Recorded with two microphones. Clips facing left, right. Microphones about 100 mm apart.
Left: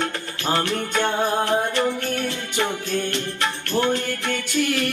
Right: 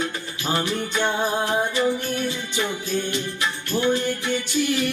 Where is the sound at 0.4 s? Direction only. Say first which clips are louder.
Left 2 dB; 60° left (ahead or behind).